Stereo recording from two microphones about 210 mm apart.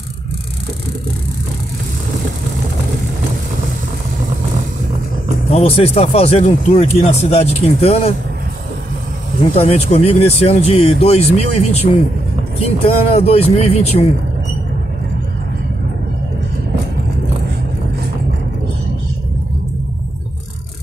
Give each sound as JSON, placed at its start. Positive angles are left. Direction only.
{"t": 5.5, "sound": "speech", "side_deg": 30}
{"t": 9.6, "sound": "speech", "side_deg": 30}